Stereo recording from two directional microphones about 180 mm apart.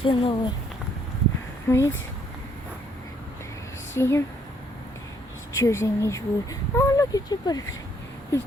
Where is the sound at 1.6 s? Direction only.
15° left (ahead or behind).